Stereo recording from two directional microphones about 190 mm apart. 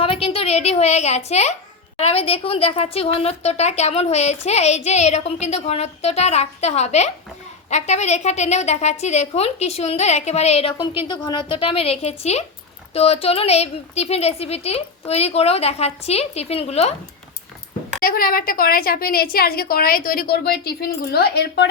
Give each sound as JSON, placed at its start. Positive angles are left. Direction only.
{"t": 0.0, "sound": "a woman's voice", "side_deg": 30}
{"t": 18.0, "sound": "a woman's voice", "side_deg": 50}